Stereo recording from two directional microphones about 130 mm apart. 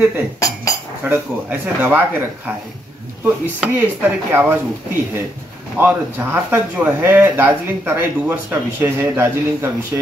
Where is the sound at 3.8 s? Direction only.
15° right (ahead or behind).